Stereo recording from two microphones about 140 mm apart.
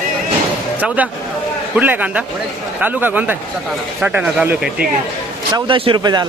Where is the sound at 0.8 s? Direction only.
10° right (ahead or behind).